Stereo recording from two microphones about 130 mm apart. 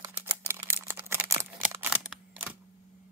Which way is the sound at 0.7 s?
20° right (ahead or behind).